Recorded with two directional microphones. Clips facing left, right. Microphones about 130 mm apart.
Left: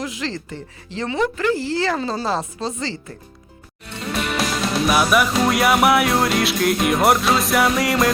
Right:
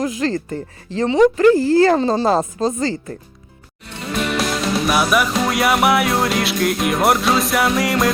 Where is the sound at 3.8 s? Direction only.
Centre (ahead or behind).